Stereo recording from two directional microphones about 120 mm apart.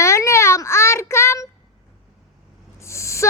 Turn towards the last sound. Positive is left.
turn(degrees=25)  # may be behind; listen again after turning